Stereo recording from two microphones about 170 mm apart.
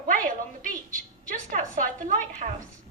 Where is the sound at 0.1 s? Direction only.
50° right (ahead or behind).